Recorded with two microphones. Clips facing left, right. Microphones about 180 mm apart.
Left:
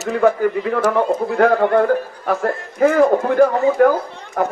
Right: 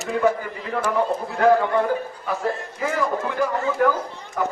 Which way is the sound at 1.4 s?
60° left (ahead or behind).